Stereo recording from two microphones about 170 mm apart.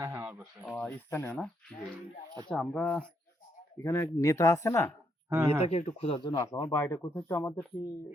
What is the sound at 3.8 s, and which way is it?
A man's voice, 15° left (ahead or behind).